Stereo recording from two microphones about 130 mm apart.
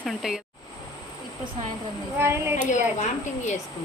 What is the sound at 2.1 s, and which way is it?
Speech, 20° right (ahead or behind).